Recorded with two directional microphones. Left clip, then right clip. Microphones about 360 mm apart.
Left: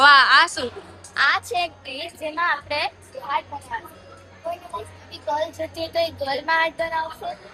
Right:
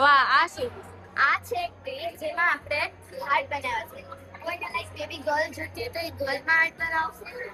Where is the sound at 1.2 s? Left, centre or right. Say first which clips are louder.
Left 3 dB; left.